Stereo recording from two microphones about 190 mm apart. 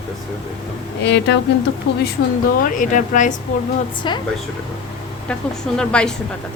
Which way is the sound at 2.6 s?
45° left (ahead or behind).